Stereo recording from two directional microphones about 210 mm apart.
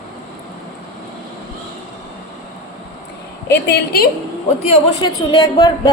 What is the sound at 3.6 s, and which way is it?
Speech, 45° left (ahead or behind).